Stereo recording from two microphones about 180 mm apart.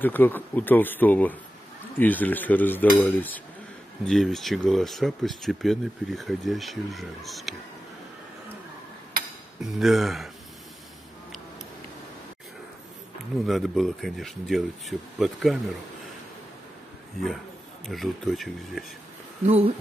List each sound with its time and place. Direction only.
0.0 s speech: 10° left (ahead or behind)
9.6 s speech: centre (ahead or behind)
13.5 s speech: centre (ahead or behind)
17.8 s speech: centre (ahead or behind)
19.4 s speech: 35° right (ahead or behind)